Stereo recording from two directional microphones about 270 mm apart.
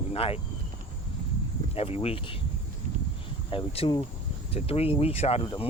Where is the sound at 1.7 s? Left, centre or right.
Left.